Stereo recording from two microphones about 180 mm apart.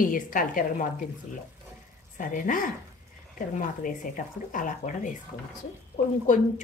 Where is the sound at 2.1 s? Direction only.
45° left (ahead or behind).